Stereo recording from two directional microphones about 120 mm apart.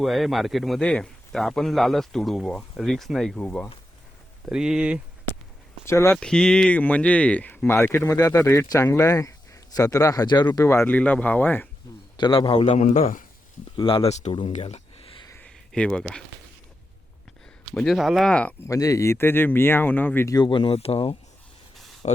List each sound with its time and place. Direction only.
0.0 s speech: centre (ahead or behind)
4.4 s speech: 5° right (ahead or behind)
5.8 s speech: 25° left (ahead or behind)
6.1 s speech: 5° left (ahead or behind); by 10.4 s 35° left (ahead or behind)
10.5 s speech: 25° left (ahead or behind)
12.1 s a man's voice: 40° left (ahead or behind)
12.6 s a man's voice: 85° left
13.7 s speech: 45° left (ahead or behind)
14.1 s speech: 70° left (ahead or behind)
15.4 s a sound: 10° left (ahead or behind)
17.8 s speech: centre (ahead or behind)
18.6 s speech: 30° left (ahead or behind)
20.2 s speech: 35° left (ahead or behind); by 21.2 s 55° left (ahead or behind)
21.8 s a sound: centre (ahead or behind)